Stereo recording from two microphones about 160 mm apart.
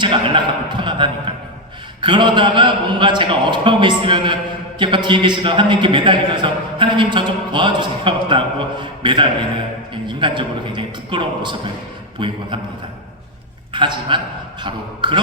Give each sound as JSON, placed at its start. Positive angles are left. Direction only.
{"t": 0.0, "sound": "a man's voice", "side_deg": -30}
{"t": 13.7, "sound": "a man's voice", "side_deg": -30}